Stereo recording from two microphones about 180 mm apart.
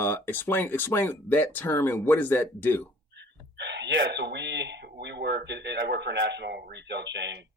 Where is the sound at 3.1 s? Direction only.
75° right (ahead or behind).